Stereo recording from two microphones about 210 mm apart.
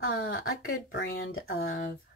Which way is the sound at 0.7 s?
45° left (ahead or behind).